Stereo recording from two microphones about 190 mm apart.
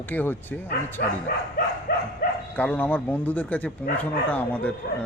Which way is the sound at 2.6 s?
10° left (ahead or behind).